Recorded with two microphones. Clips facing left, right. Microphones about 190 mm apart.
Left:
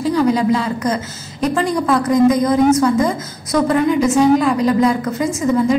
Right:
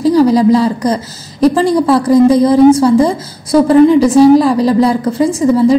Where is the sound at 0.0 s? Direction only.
35° right (ahead or behind).